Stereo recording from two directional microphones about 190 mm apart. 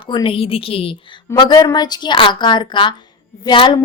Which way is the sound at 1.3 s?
20° left (ahead or behind).